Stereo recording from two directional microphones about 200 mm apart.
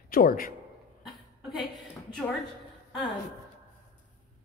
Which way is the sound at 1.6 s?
Centre (ahead or behind).